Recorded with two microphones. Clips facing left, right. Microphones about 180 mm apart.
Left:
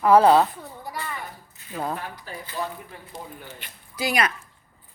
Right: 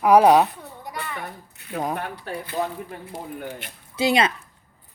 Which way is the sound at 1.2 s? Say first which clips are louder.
Right 3 dB; 65° right (ahead or behind).